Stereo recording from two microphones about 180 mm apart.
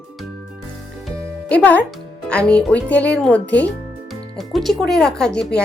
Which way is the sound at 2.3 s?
5° left (ahead or behind).